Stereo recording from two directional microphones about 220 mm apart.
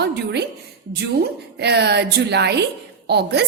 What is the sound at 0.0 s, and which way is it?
Speech, 50° right (ahead or behind).